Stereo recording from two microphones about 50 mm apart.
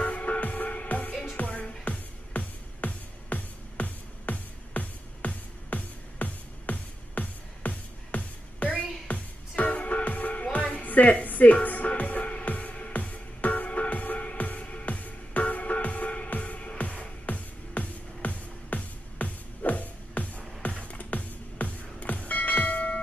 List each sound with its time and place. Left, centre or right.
0.0 s music: left